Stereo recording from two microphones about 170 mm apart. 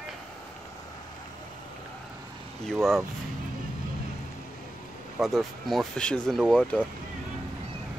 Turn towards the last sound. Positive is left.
turn(degrees=5)  # may be behind; listen again after turning